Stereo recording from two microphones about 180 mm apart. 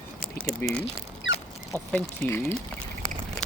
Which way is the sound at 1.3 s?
90° left.